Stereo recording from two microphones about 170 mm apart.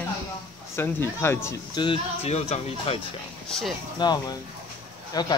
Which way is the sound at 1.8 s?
35° left (ahead or behind).